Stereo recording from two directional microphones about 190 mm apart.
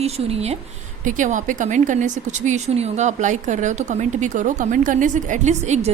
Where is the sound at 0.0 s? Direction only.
35° right (ahead or behind).